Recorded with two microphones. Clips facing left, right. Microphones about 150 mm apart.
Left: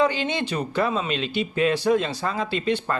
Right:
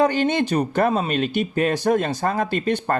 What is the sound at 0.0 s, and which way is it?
A man's voice, 50° right (ahead or behind).